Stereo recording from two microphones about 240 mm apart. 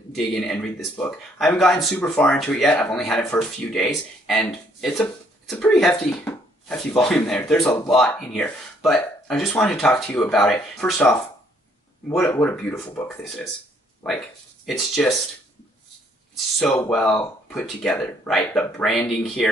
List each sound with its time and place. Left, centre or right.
0.1 s speech: centre
16.5 s speech: centre